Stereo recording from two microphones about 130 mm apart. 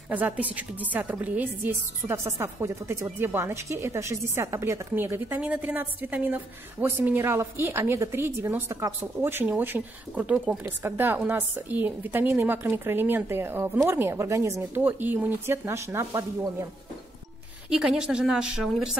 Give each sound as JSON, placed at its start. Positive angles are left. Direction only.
{"t": 0.1, "sound": "a woman's voice", "side_deg": -10}
{"t": 17.6, "sound": "a woman's voice", "side_deg": -5}